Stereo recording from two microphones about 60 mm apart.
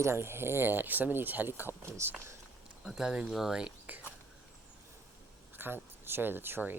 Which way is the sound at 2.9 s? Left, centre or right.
Centre.